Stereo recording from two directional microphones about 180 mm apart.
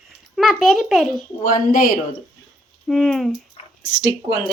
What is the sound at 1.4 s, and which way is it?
Speech, 50° left (ahead or behind).